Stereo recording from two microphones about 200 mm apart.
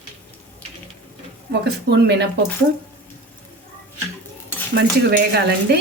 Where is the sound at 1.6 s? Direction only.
55° right (ahead or behind).